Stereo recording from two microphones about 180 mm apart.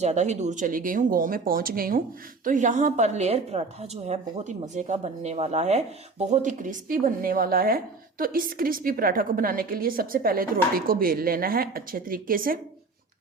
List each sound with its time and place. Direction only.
0.0 s a woman's voice: 40° right (ahead or behind)